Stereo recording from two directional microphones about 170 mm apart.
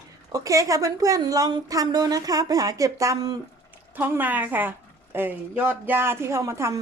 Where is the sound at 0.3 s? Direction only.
20° right (ahead or behind).